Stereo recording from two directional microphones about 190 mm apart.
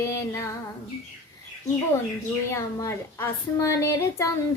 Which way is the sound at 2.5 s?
15° left (ahead or behind).